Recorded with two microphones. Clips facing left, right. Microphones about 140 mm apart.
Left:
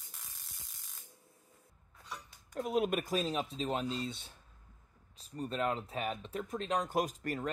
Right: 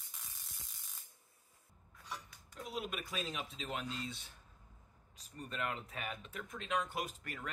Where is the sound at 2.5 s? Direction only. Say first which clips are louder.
Left 11 dB; 50° left (ahead or behind).